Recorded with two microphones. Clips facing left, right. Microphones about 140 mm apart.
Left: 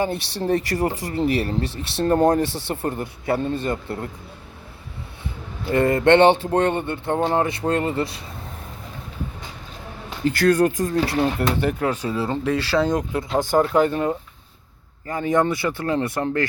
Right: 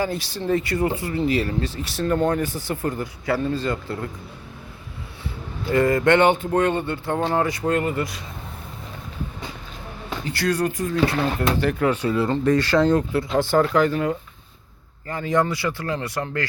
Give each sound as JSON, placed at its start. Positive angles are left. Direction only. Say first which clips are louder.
{"t": 0.1, "sound": "speech", "louder": "left 1 dB", "side_deg": 70}
{"t": 0.4, "sound": "speech", "louder": "even", "side_deg": 40}
{"t": 5.7, "sound": "speech", "louder": "left 2 dB", "side_deg": 25}
{"t": 6.7, "sound": "speech", "louder": "left 1 dB", "side_deg": 20}
{"t": 10.2, "sound": "speech", "louder": "left 6 dB", "side_deg": 50}
{"t": 11.7, "sound": "speech", "louder": "right 2 dB", "side_deg": 10}